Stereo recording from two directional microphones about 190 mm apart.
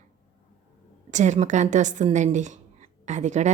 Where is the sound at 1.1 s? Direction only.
40° right (ahead or behind).